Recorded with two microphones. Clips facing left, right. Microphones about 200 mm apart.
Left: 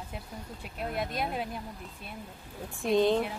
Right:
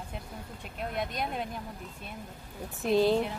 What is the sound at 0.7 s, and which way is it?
Speech, centre (ahead or behind).